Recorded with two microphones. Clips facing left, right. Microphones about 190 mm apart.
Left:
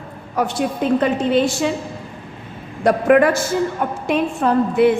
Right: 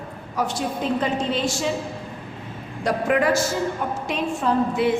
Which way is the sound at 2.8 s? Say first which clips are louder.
Left 7 dB; 55° left (ahead or behind).